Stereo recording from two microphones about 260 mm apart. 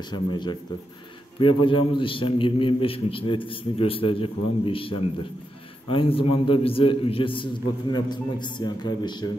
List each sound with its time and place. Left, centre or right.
0.1 s a man's voice: centre